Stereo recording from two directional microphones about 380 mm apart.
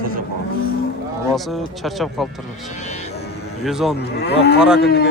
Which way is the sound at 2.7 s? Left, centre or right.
Centre.